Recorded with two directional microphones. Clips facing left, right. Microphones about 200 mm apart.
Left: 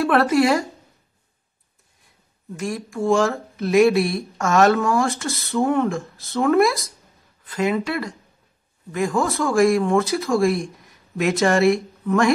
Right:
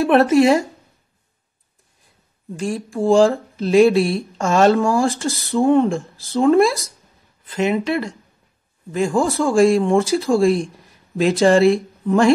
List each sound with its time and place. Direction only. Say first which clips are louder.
0.0 s speech: right 4 dB; 25° right (ahead or behind)
2.5 s speech: right 3 dB; 30° right (ahead or behind)